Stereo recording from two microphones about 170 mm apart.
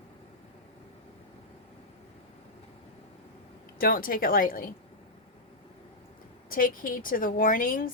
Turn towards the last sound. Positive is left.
turn(degrees=55)  # may be behind; listen again after turning